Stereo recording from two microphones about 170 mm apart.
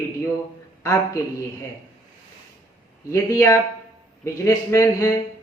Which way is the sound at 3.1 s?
15° left (ahead or behind).